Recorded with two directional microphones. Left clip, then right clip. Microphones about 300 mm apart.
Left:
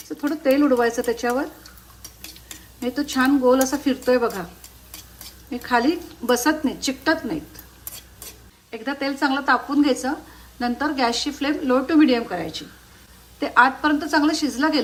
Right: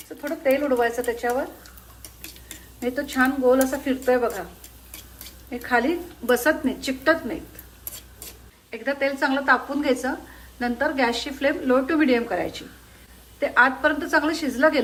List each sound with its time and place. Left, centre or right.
0.2 s speech: centre
2.5 s speech: centre
5.5 s speech: centre
8.7 s speech: centre